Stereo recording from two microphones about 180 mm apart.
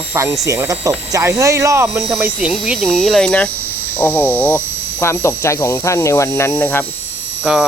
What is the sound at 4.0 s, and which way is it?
Speech, 10° left (ahead or behind).